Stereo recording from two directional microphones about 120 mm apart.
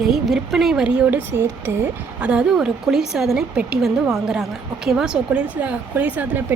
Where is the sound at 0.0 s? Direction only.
Centre (ahead or behind); by 2.3 s 20° right (ahead or behind).